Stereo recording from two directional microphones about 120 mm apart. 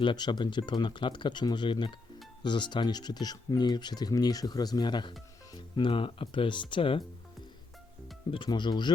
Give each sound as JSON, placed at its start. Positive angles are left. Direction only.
{"t": 0.0, "sound": "speech", "side_deg": 40}
{"t": 8.3, "sound": "speech", "side_deg": 40}